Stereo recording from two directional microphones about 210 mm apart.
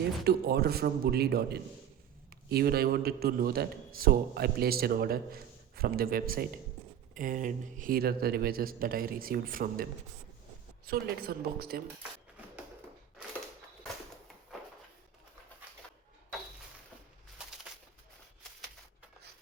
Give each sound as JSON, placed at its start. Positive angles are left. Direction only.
{"t": 0.3, "sound": "a man's voice", "side_deg": -50}